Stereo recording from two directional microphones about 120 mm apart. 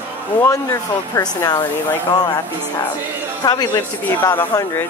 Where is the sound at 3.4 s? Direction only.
35° left (ahead or behind).